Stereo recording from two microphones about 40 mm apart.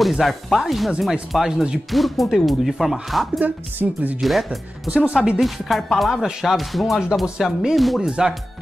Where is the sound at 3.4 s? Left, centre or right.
Right.